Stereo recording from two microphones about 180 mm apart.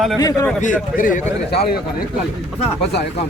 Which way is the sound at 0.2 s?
20° left (ahead or behind).